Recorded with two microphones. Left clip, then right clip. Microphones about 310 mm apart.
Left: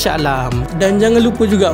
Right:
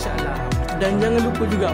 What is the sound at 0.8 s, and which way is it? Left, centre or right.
Speech, centre.